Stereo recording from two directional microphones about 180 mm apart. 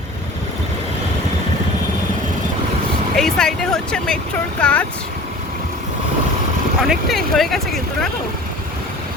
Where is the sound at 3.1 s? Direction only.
5° left (ahead or behind).